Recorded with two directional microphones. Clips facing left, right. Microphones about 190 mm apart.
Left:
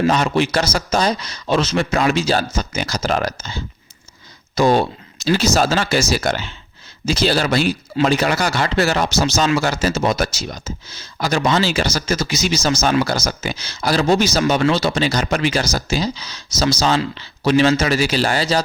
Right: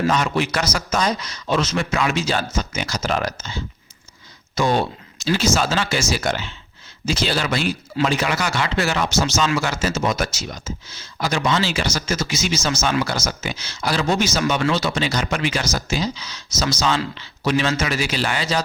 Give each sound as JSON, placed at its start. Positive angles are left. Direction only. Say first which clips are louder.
{"t": 0.1, "sound": "speech", "louder": "left 3 dB", "side_deg": 30}